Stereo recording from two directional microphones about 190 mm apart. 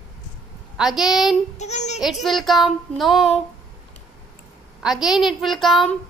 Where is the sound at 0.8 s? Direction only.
Centre (ahead or behind).